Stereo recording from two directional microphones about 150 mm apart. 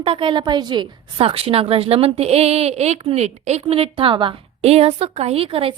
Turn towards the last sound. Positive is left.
turn(degrees=-40)  # may be behind; listen again after turning